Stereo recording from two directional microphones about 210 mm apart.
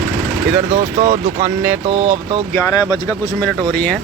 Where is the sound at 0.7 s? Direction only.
35° right (ahead or behind).